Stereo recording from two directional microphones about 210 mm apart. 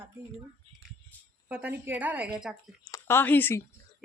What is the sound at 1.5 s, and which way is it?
Speech, 10° right (ahead or behind).